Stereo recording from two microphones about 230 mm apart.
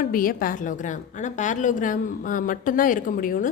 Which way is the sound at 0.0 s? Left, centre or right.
Left.